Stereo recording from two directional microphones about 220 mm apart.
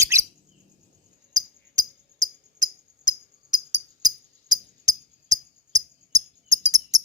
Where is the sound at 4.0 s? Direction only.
15° right (ahead or behind).